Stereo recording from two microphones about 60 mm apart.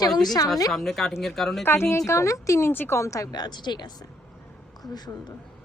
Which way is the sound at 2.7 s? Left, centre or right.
Left.